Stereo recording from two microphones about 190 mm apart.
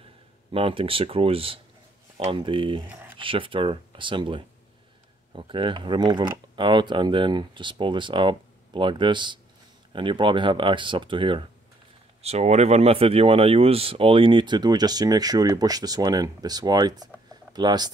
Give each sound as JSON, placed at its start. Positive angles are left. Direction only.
{"t": 0.5, "sound": "speech", "side_deg": -30}
{"t": 2.9, "sound": "a sound", "side_deg": -10}
{"t": 3.2, "sound": "speech", "side_deg": -25}